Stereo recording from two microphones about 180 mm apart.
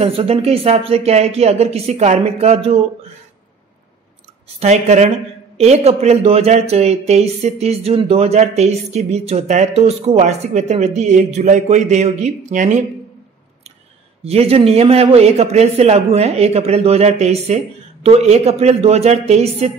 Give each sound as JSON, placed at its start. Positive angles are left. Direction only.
{"t": 0.0, "sound": "speech", "side_deg": -30}
{"t": 4.6, "sound": "speech", "side_deg": -40}
{"t": 14.2, "sound": "speech", "side_deg": -35}